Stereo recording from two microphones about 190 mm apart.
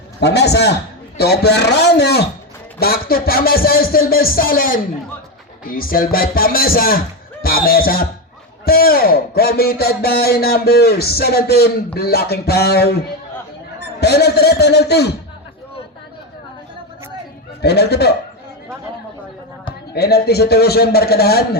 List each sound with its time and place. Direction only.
0.2 s a man's voice: 60° left (ahead or behind)
14.0 s a man's voice: 60° left (ahead or behind)
17.6 s a man's voice: 60° left (ahead or behind)
19.9 s a man's voice: 55° left (ahead or behind)